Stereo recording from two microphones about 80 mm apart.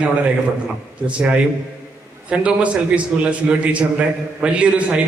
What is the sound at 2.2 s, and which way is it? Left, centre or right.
A man's voice, centre.